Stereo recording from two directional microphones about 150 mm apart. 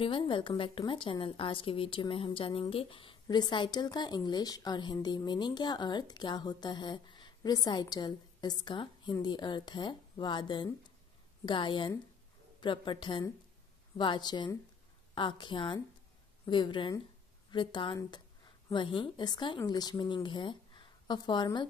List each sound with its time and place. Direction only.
0.0 s a woman's voice: 35° left (ahead or behind)